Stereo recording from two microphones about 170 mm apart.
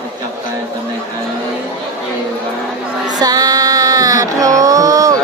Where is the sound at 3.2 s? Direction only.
20° right (ahead or behind).